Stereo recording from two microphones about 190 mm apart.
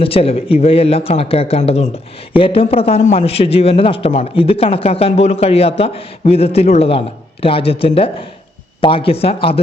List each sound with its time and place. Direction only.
0.0 s speech: 30° left (ahead or behind)